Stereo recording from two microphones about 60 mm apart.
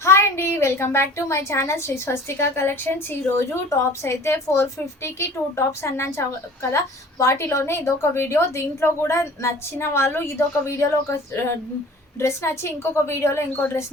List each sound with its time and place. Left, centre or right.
0.0 s a woman's voice: left
3.7 s a woman's voice: left
12.2 s a woman's voice: left